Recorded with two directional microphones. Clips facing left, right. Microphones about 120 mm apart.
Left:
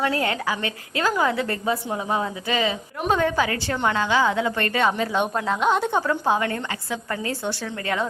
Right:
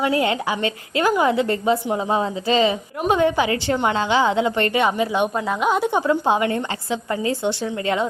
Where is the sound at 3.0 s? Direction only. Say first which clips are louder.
Right 3 dB; 15° right (ahead or behind).